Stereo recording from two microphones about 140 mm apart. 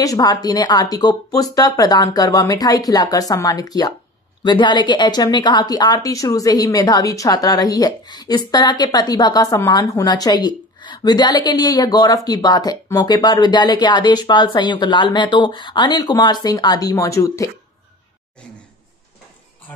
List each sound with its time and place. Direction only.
0.0 s speech: 25° left (ahead or behind)